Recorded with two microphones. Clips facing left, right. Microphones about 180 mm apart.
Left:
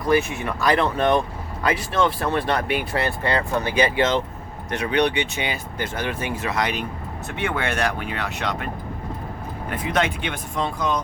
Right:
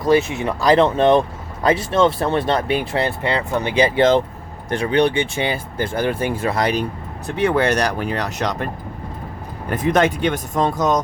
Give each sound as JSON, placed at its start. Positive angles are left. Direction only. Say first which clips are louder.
{"t": 0.0, "sound": "speech", "louder": "right 4 dB", "side_deg": -20}
{"t": 9.6, "sound": "speech", "louder": "right 7 dB", "side_deg": -45}